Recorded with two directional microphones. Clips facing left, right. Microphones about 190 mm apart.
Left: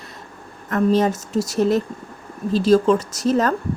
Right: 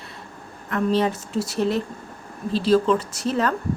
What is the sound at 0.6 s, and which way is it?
A woman's voice, 45° left (ahead or behind).